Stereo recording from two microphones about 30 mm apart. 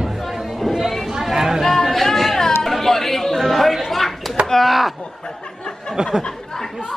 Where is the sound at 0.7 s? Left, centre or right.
Centre.